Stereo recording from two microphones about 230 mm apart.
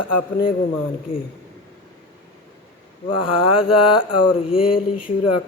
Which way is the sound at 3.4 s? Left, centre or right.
Left.